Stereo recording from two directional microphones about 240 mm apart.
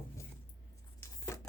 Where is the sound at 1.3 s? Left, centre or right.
Centre.